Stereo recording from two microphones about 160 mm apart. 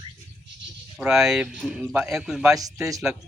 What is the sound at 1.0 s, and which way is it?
Speech, 5° right (ahead or behind).